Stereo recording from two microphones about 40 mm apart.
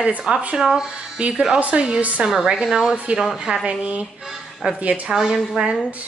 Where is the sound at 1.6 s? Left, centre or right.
Right.